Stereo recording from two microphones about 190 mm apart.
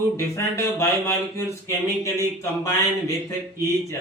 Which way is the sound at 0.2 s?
15° left (ahead or behind).